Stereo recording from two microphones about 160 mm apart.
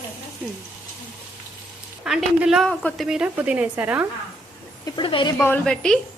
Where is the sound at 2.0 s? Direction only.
5° right (ahead or behind).